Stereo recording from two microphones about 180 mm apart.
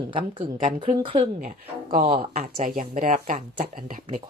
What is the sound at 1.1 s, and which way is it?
Speech, 40° right (ahead or behind).